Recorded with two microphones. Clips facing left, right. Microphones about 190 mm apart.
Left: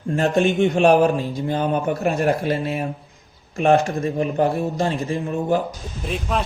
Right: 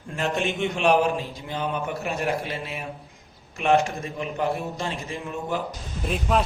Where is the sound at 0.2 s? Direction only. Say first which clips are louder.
Left 7 dB; 40° left (ahead or behind).